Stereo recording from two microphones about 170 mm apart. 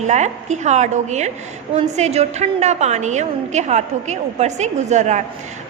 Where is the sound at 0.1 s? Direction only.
45° right (ahead or behind).